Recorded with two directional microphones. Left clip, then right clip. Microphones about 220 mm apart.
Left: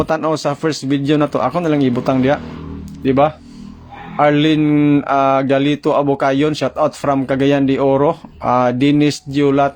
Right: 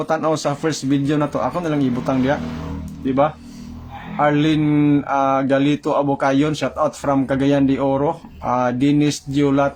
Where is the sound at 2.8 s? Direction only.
35° left (ahead or behind).